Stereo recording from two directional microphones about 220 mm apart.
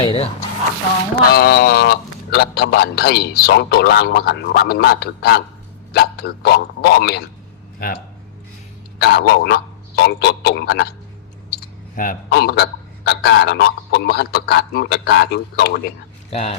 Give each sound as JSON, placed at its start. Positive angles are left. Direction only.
{"t": 0.0, "sound": "speech", "side_deg": 25}
{"t": 1.3, "sound": "a man's voice", "side_deg": 45}
{"t": 9.0, "sound": "a man's voice", "side_deg": 50}
{"t": 11.5, "sound": "a sound", "side_deg": 40}
{"t": 13.1, "sound": "a man's voice", "side_deg": 50}
{"t": 16.3, "sound": "speech", "side_deg": 30}